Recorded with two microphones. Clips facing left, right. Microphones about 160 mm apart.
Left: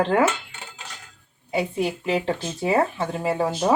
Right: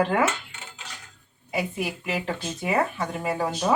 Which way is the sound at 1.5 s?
30° left (ahead or behind).